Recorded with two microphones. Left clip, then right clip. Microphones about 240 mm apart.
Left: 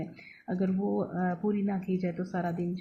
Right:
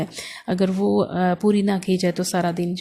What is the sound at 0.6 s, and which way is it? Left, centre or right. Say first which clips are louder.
Speech: right 11 dB; right.